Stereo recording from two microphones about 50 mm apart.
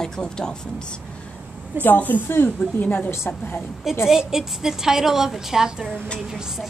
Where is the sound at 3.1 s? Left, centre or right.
Left.